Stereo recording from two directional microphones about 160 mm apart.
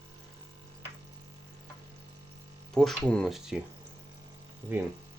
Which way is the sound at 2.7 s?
5° left (ahead or behind).